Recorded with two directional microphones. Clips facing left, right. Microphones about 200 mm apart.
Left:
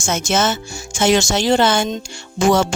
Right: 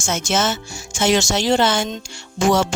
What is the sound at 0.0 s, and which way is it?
Speech, 55° left (ahead or behind).